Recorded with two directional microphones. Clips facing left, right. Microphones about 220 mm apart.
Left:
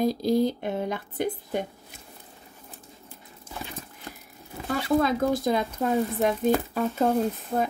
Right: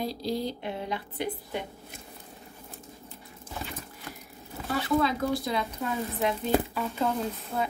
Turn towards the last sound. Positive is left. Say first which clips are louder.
# left 5 dB
turn(degrees=45)  # may be behind; listen again after turning